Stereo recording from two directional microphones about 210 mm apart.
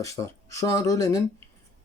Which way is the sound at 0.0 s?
15° left (ahead or behind).